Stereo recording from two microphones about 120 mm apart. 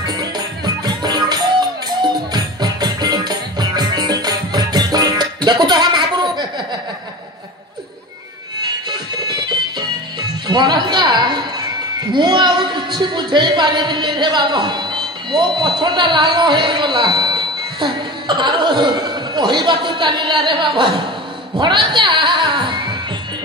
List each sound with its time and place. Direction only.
0.0 s music: 30° right (ahead or behind)
9.3 s music: 35° right (ahead or behind)
10.5 s a sound: 40° right (ahead or behind)
12.1 s speech: 40° right (ahead or behind)